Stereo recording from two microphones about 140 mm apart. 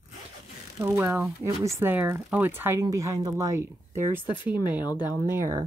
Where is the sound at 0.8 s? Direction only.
20° right (ahead or behind).